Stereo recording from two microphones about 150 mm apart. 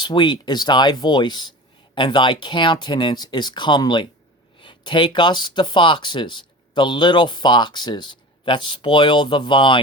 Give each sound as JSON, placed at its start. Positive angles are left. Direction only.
{"t": 0.0, "sound": "speech", "side_deg": 30}